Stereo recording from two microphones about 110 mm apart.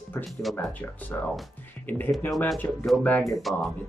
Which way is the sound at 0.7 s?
15° left (ahead or behind).